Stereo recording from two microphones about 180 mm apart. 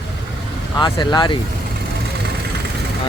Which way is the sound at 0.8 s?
25° left (ahead or behind).